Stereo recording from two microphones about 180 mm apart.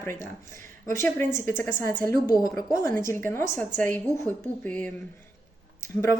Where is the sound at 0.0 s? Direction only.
15° left (ahead or behind).